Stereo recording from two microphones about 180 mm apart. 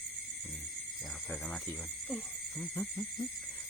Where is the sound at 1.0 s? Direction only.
Centre (ahead or behind).